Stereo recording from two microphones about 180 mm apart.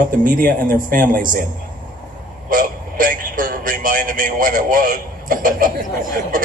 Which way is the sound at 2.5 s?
50° right (ahead or behind).